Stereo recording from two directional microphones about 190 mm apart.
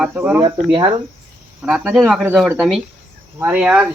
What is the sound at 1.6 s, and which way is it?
Speech, 5° right (ahead or behind).